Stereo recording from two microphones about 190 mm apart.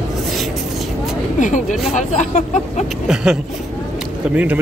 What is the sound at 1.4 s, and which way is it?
Speech, 40° left (ahead or behind).